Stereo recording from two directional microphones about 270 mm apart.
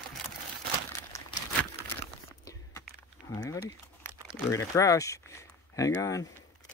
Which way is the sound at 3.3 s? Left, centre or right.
Centre.